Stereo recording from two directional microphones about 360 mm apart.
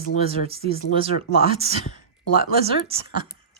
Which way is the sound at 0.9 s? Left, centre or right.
Centre.